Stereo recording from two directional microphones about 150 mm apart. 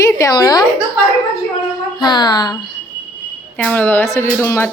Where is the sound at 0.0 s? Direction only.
25° left (ahead or behind).